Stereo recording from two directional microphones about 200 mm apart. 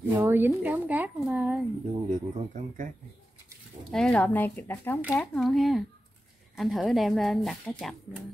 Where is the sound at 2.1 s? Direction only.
40° right (ahead or behind).